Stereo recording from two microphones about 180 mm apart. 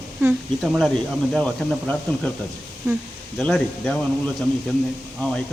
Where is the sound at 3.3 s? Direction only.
Centre (ahead or behind).